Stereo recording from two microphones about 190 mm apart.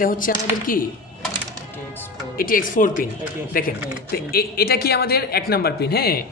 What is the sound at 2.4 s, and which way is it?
Speech, 45° left (ahead or behind).